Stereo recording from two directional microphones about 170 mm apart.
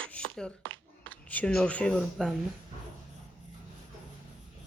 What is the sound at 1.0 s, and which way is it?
Speech, 10° left (ahead or behind).